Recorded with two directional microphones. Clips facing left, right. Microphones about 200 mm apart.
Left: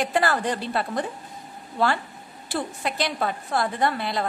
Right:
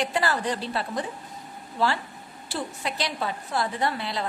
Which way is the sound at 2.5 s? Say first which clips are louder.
Left 3 dB; 55° left (ahead or behind).